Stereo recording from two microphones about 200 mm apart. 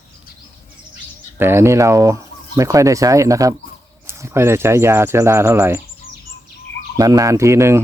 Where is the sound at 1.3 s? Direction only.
10° right (ahead or behind).